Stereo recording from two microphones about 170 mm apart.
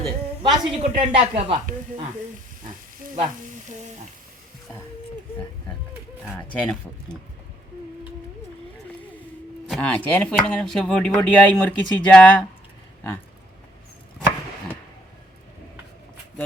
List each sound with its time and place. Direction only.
0.0 s a sound: centre (ahead or behind)
0.8 s speech: 35° right (ahead or behind)
6.5 s speech: 5° left (ahead or behind)
9.6 s speech: 5° left (ahead or behind)